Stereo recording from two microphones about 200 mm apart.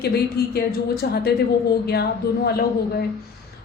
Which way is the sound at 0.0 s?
55° left (ahead or behind).